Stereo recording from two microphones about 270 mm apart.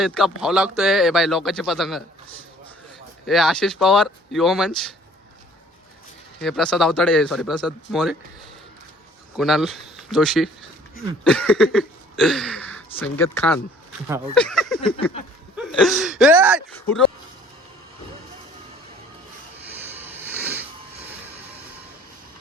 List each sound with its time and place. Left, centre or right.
0.0 s speech: centre
3.2 s speech: centre
6.4 s speech: centre
9.4 s speech: centre
19.8 s a sound: centre